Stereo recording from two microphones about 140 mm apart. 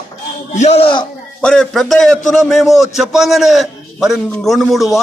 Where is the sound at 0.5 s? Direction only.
55° left (ahead or behind).